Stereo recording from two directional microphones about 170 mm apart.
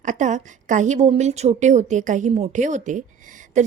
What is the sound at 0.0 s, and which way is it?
A woman's voice, 45° right (ahead or behind).